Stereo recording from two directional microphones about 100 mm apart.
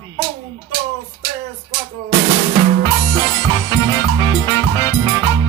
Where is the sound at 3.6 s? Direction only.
30° left (ahead or behind).